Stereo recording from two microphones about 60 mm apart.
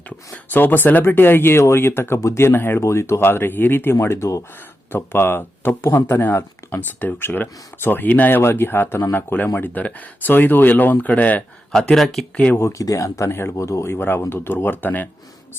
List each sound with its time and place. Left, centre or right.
0.5 s speech: left
11.7 s speech: centre
12.8 s speech: left
13.3 s speech: left